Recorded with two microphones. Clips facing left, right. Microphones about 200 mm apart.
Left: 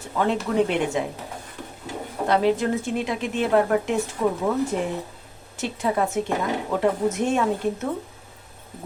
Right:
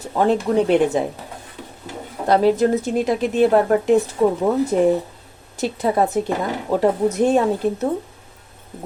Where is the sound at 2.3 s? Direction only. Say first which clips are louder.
Right 5 dB; 40° right (ahead or behind).